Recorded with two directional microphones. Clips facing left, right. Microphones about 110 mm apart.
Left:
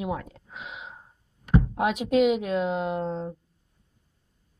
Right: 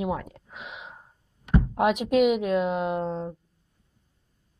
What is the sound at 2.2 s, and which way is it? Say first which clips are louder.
Speech: even; 60° right (ahead or behind).